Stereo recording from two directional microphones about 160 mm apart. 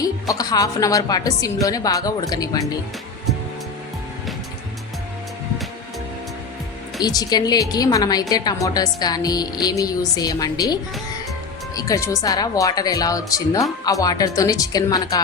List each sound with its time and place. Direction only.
0.0 s a woman's voice: 25° left (ahead or behind)
7.0 s a woman's voice: 25° left (ahead or behind)